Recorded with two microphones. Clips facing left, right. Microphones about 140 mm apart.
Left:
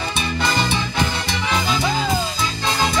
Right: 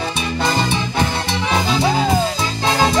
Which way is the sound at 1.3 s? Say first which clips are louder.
Right 3 dB; 30° right (ahead or behind).